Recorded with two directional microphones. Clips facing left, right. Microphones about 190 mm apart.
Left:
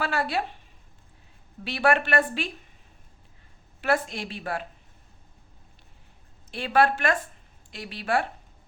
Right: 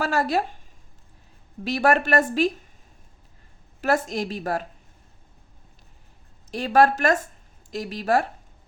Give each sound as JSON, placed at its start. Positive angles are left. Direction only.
{"t": 0.0, "sound": "a woman's voice", "side_deg": -40}
{"t": 1.6, "sound": "a woman's voice", "side_deg": -40}
{"t": 3.8, "sound": "a woman's voice", "side_deg": -40}
{"t": 6.5, "sound": "a woman's voice", "side_deg": -40}